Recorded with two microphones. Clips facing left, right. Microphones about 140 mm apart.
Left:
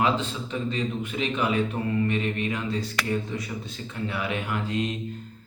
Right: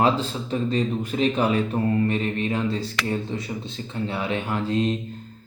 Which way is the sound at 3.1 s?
30° right (ahead or behind).